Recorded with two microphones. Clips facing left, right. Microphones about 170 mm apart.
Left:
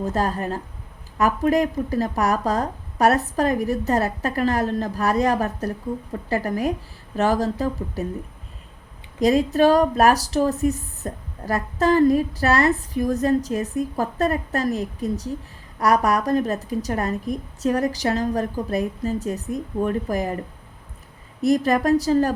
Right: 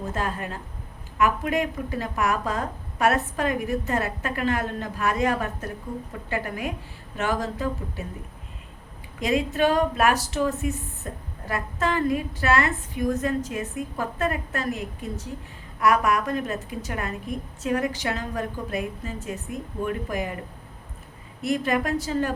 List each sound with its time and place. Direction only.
0.0 s speech: 40° left (ahead or behind)
9.2 s speech: 40° left (ahead or behind)
21.4 s speech: 40° left (ahead or behind)